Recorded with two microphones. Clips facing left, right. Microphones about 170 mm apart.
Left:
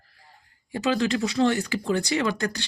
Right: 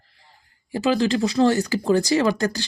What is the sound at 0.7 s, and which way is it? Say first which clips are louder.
Speech: right 4 dB; 30° right (ahead or behind).